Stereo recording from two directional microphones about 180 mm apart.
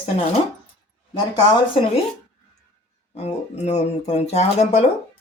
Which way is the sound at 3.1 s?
40° left (ahead or behind).